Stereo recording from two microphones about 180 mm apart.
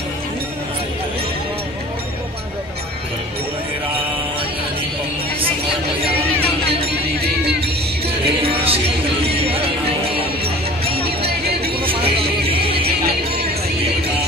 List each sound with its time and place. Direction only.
7.2 s music: 65° right (ahead or behind)
8.3 s music: 30° right (ahead or behind)
11.2 s music: 60° right (ahead or behind)
11.8 s music: 30° right (ahead or behind)